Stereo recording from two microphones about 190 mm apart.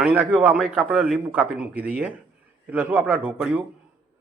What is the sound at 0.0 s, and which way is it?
Speech, 10° right (ahead or behind).